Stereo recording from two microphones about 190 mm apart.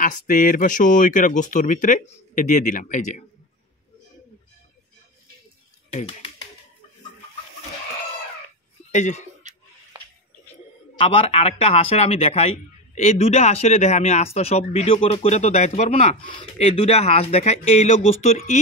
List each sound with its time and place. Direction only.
0.0 s speech: 45° left (ahead or behind)
8.9 s speech: 40° left (ahead or behind)
9.5 s a sound: 40° right (ahead or behind)
11.0 s a man's voice: 35° left (ahead or behind)